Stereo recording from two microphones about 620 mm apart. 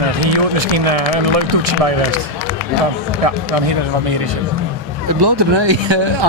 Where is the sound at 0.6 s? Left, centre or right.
Right.